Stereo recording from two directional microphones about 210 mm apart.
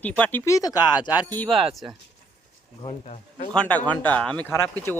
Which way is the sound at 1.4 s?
Centre (ahead or behind).